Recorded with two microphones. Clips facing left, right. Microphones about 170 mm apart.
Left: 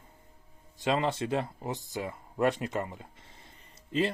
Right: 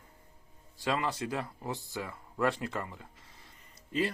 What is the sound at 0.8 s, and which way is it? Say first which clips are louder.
Speech: left 4 dB; 25° left (ahead or behind).